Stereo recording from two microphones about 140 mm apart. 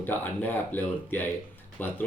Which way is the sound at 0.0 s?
15° left (ahead or behind).